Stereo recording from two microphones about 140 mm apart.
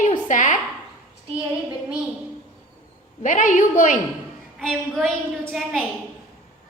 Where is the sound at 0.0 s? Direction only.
65° left (ahead or behind).